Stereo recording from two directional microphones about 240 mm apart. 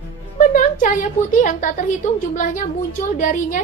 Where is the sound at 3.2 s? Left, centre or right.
Left.